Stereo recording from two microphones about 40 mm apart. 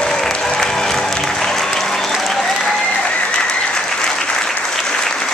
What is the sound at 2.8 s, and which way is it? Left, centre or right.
Applause, left.